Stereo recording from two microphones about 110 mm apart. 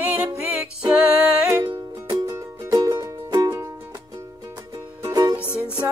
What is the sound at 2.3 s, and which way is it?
Music, 35° right (ahead or behind).